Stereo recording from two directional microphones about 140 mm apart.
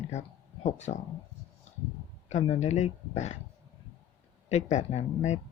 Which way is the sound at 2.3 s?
50° left (ahead or behind).